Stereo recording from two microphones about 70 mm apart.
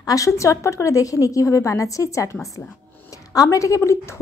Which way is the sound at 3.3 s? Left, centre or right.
Left.